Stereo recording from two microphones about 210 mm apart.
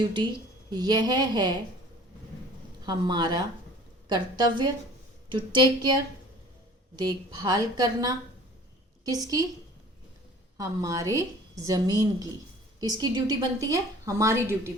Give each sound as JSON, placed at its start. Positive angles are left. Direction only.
{"t": 0.0, "sound": "a woman's voice", "side_deg": -20}
{"t": 2.8, "sound": "a woman's voice", "side_deg": -20}
{"t": 6.9, "sound": "a woman's voice", "side_deg": -20}
{"t": 10.6, "sound": "a woman's voice", "side_deg": -15}